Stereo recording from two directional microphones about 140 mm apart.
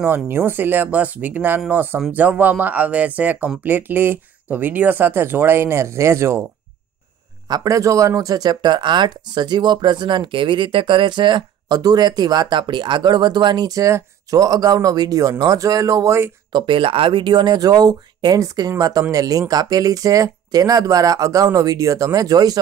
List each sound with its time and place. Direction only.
0.0 s speech: 15° right (ahead or behind)
7.4 s speech: 25° right (ahead or behind)
16.5 s speech: 35° right (ahead or behind)